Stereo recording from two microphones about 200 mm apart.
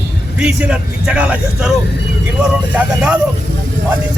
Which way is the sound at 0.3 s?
5° right (ahead or behind).